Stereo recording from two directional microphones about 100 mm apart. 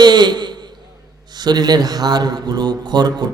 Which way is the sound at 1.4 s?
45° right (ahead or behind).